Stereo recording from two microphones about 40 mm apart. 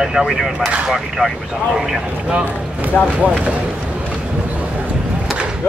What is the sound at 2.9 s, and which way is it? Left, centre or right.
Speech, left.